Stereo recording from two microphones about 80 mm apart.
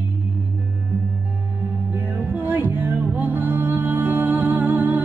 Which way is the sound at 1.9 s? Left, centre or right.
Right.